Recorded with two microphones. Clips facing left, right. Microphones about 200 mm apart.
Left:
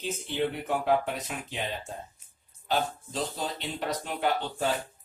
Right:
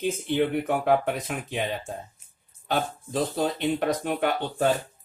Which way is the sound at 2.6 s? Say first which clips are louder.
Right 2 dB; 55° right (ahead or behind).